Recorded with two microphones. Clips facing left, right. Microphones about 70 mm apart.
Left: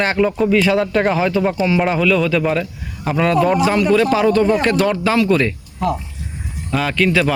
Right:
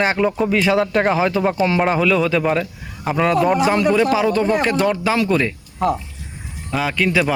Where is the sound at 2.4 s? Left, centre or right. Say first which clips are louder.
Even; centre.